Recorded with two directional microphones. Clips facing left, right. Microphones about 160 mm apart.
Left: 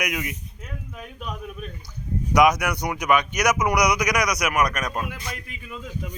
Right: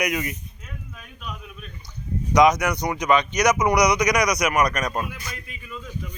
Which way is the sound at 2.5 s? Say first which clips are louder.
Right 2 dB; 10° left (ahead or behind).